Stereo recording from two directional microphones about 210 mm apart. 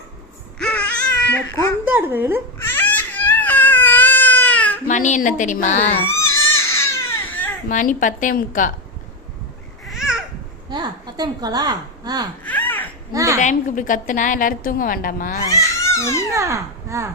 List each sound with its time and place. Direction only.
0.6 s baby cry: 5° left (ahead or behind)
1.8 s a woman's voice: 10° right (ahead or behind)
2.6 s baby cry: 10° left (ahead or behind)
4.9 s a woman's voice: 35° left (ahead or behind)
6.2 s crying: 10° left (ahead or behind)
7.7 s a woman's voice: 40° left (ahead or behind)
9.8 s babbling: centre (ahead or behind)
10.7 s a woman's voice: 20° right (ahead or behind)
12.5 s a sound: 10° left (ahead or behind)
13.1 s speech: 15° right (ahead or behind)
13.4 s a woman's voice: 35° left (ahead or behind)
15.4 s crying: 15° left (ahead or behind)
16.3 s speech: 15° right (ahead or behind)